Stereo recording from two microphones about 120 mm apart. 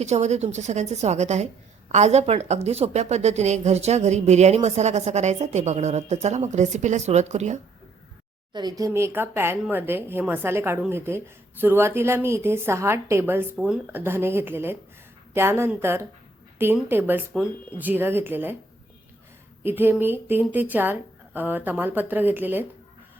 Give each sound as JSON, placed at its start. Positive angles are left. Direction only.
{"t": 0.0, "sound": "a woman's voice", "side_deg": -70}
{"t": 8.5, "sound": "a woman's voice", "side_deg": -30}
{"t": 19.6, "sound": "a woman's voice", "side_deg": -15}